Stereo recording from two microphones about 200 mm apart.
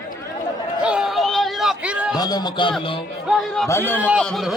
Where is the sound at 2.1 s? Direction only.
20° left (ahead or behind).